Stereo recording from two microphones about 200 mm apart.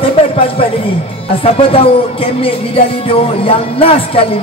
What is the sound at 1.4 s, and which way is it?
Speech, 30° left (ahead or behind).